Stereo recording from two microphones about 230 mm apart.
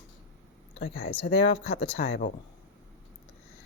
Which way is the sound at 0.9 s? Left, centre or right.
Left.